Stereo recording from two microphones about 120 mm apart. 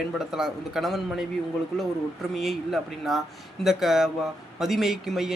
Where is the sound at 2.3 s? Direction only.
Centre (ahead or behind).